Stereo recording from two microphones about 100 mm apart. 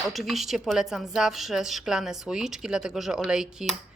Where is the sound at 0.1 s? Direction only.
Centre (ahead or behind).